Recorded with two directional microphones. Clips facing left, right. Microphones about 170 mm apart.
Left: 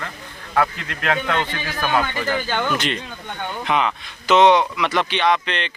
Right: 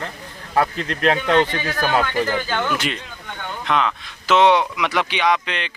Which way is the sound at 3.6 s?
5° left (ahead or behind).